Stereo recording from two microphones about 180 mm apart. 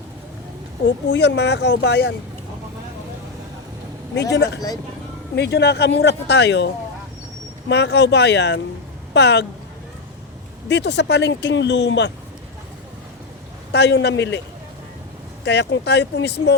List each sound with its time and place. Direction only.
1.1 s speech: 75° left (ahead or behind)
4.4 s speech: 70° left (ahead or behind)
7.7 s speech: 70° left (ahead or behind)
10.7 s speech: 70° left (ahead or behind)
13.7 s speech: 70° left (ahead or behind)
15.4 s speech: 70° left (ahead or behind)